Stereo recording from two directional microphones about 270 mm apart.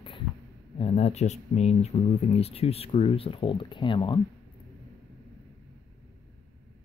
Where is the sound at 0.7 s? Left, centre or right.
Left.